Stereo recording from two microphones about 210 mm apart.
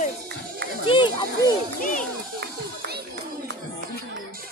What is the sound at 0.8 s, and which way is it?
Run, 20° left (ahead or behind).